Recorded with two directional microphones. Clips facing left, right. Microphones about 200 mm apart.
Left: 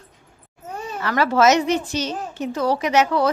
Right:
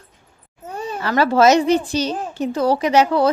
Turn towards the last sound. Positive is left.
turn(degrees=-30)  # may be behind; listen again after turning